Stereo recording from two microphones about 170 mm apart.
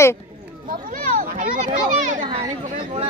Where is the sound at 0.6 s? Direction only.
55° right (ahead or behind).